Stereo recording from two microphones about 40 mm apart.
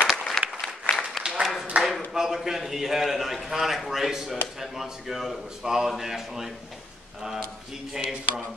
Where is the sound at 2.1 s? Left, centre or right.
Centre.